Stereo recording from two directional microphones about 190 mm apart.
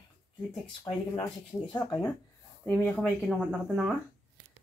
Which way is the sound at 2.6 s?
10° left (ahead or behind).